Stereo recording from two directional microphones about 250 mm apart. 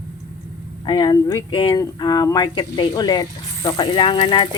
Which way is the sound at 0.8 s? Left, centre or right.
Centre.